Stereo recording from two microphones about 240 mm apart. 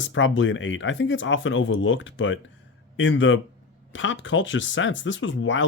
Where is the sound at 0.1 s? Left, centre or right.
Left.